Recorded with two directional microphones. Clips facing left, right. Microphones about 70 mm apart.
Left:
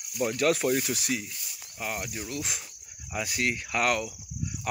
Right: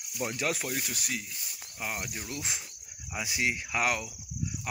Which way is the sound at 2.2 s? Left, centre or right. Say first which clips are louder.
Left 3 dB; right.